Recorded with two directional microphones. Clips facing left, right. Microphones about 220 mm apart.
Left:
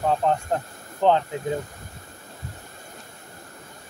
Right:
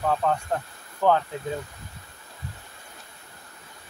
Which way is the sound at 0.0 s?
20° left (ahead or behind).